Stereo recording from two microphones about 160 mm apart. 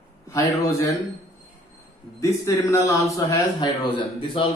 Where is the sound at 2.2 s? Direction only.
20° left (ahead or behind).